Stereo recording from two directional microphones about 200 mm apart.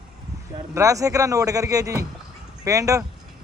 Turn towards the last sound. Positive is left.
turn(degrees=-15)  # may be behind; listen again after turning